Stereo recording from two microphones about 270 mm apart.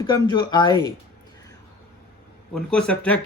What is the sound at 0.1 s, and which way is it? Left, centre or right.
Speech, centre.